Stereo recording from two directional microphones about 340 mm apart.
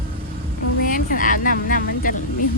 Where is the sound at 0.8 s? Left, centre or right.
Left.